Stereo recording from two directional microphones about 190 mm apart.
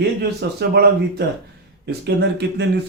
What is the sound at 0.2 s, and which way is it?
Speech, 60° right (ahead or behind).